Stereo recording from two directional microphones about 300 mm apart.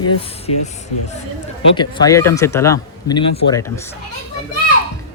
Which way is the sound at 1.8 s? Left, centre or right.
Centre.